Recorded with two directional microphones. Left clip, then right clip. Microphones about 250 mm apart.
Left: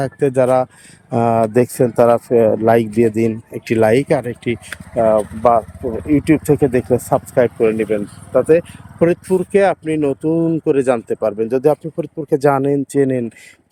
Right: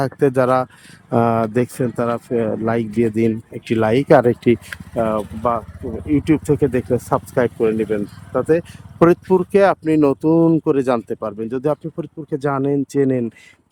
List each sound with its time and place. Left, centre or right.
0.0 s speech: centre